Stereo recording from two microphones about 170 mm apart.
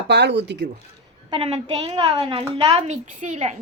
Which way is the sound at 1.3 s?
35° right (ahead or behind).